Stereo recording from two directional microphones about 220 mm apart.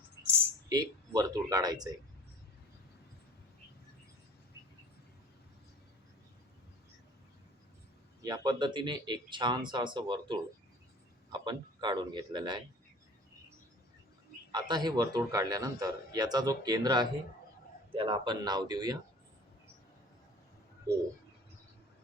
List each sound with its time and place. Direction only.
0.3 s speech: 15° right (ahead or behind)
8.2 s speech: 20° right (ahead or behind)
14.5 s a man's voice: 20° right (ahead or behind)